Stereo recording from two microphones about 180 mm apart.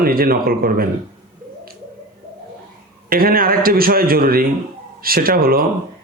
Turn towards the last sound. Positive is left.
turn(degrees=-55)  # may be behind; listen again after turning